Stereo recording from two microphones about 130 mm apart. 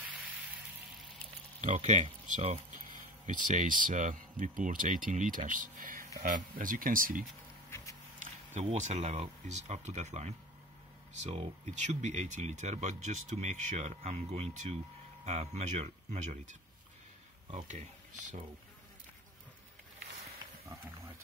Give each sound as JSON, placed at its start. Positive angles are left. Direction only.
{"t": 1.6, "sound": "speech", "side_deg": -60}
{"t": 3.3, "sound": "speech", "side_deg": -85}
{"t": 8.2, "sound": "speech", "side_deg": -65}
{"t": 17.6, "sound": "speech", "side_deg": -70}
{"t": 20.6, "sound": "speech", "side_deg": -25}